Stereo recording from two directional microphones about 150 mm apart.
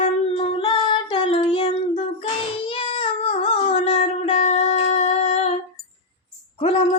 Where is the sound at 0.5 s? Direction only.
30° left (ahead or behind).